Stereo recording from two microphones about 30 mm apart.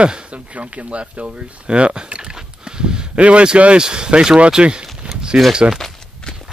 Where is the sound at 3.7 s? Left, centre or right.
Right.